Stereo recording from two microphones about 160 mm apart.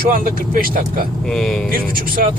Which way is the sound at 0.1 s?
60° right (ahead or behind).